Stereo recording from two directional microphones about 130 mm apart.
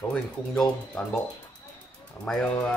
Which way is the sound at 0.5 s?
5° left (ahead or behind).